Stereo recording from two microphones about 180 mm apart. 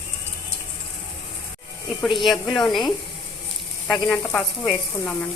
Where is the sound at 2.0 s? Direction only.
Centre (ahead or behind).